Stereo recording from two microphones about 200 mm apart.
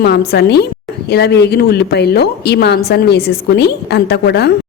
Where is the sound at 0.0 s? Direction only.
55° left (ahead or behind).